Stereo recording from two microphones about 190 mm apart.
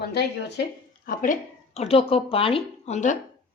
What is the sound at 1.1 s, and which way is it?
Speech, 45° left (ahead or behind).